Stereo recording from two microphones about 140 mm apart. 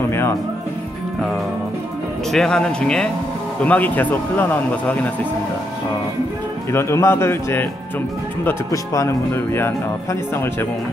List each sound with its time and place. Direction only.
0.1 s music: 20° left (ahead or behind)
2.3 s speech: 5° left (ahead or behind)
6.7 s speech: 20° left (ahead or behind)